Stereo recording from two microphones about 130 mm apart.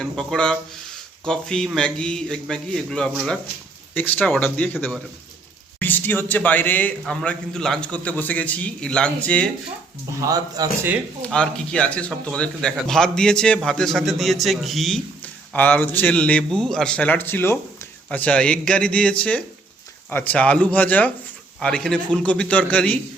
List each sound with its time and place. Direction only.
0.0 s a man's voice: centre (ahead or behind)
10.1 s speech: 25° right (ahead or behind)
11.3 s a man's voice: 5° left (ahead or behind)
15.2 s a man's voice: 15° left (ahead or behind)